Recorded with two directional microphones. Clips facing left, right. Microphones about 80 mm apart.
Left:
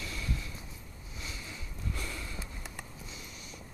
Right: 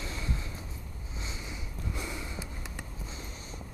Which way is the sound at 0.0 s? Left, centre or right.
Right.